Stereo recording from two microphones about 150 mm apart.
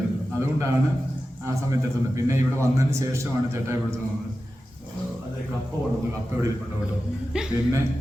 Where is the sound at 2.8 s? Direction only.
20° right (ahead or behind).